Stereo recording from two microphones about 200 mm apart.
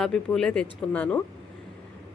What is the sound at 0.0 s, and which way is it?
Speech, 5° left (ahead or behind).